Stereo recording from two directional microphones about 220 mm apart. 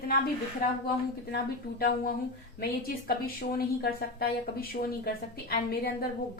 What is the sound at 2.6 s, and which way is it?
A woman's voice, 45° left (ahead or behind).